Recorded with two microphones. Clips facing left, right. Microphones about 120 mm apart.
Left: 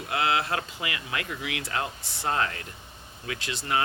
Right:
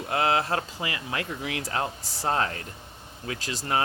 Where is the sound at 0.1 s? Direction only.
40° right (ahead or behind).